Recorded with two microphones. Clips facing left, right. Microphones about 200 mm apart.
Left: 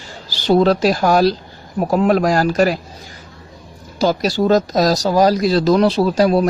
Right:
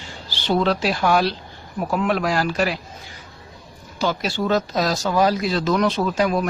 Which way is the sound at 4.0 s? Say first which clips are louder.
Left 7 dB; 40° left (ahead or behind).